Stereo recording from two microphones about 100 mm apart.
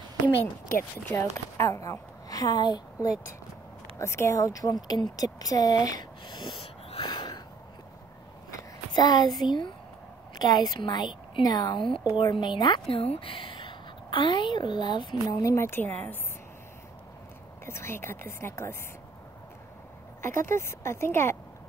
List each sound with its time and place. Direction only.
1.3 s a woman's voice: 30° left (ahead or behind)
4.0 s speech: 25° left (ahead or behind)
5.1 s a sound: 35° left (ahead or behind); by 7.1 s 65° left (ahead or behind)
7.1 s a sound: 45° left (ahead or behind)
8.9 s speech: 45° left (ahead or behind)
12.9 s a woman's voice: 70° left (ahead or behind); by 15.1 s 50° left (ahead or behind)
15.2 s a woman's voice: 30° left (ahead or behind)
17.6 s a woman's voice: 25° left (ahead or behind)
20.2 s a woman's voice: 25° left (ahead or behind)